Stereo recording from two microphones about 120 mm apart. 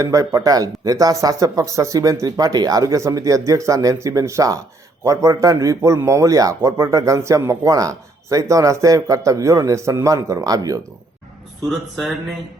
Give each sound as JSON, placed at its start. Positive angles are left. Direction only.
{"t": 0.0, "sound": "a man's voice", "side_deg": -25}